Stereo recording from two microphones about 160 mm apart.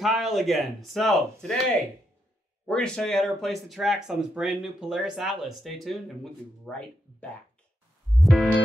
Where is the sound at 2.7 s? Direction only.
5° left (ahead or behind).